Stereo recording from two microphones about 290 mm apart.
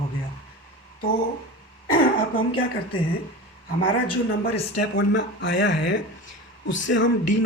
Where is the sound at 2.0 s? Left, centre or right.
Left.